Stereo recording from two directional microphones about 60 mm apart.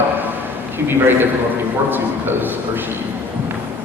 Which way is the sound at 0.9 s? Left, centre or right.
Right.